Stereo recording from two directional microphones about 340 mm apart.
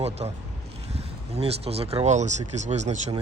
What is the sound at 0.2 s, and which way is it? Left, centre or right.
Speech, centre.